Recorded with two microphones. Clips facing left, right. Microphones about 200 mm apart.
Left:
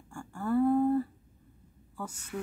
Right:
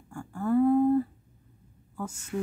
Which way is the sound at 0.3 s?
20° right (ahead or behind).